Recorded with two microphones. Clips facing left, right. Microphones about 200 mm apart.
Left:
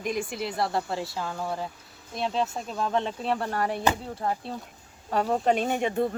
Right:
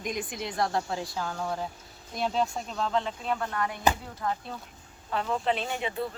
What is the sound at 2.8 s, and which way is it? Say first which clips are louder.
Speech: left 2 dB; 20° left (ahead or behind).